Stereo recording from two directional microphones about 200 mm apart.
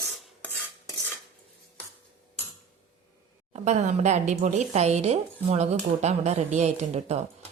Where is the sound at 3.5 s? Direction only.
35° right (ahead or behind).